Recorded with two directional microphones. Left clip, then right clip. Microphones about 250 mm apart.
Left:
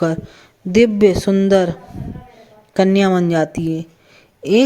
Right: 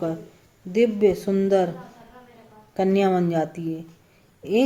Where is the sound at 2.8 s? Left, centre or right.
Left.